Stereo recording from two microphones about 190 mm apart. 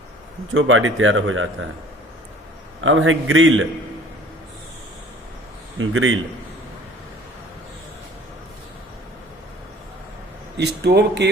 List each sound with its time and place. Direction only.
0.5 s speech: 90° right
2.8 s speech: 90° right
5.8 s speech: 90° right
10.6 s speech: 60° right (ahead or behind)